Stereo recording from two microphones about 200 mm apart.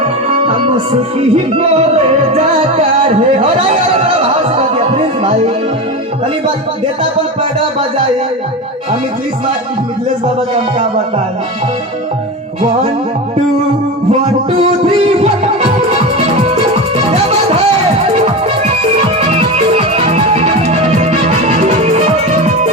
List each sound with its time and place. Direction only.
0.0 s music: 30° right (ahead or behind)
14.6 s music: 30° right (ahead or behind)
17.0 s music: 30° right (ahead or behind)